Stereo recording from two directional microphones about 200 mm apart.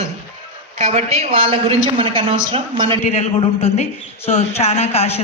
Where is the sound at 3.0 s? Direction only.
30° left (ahead or behind).